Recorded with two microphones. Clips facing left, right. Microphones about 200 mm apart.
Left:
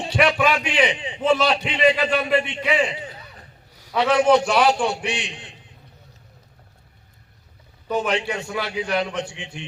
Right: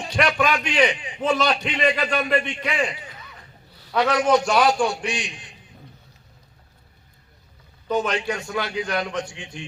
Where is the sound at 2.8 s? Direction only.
25° left (ahead or behind).